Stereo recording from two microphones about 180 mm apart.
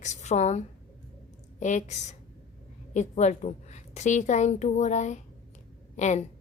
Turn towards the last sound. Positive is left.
turn(degrees=40)  # may be behind; listen again after turning